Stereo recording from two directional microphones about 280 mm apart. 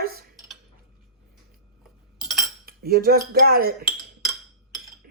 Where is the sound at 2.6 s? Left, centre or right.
Right.